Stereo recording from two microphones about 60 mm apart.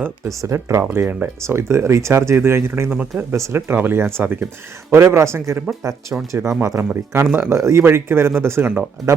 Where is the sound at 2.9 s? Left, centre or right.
Right.